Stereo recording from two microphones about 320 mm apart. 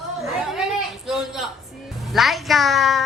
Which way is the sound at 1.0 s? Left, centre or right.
Centre.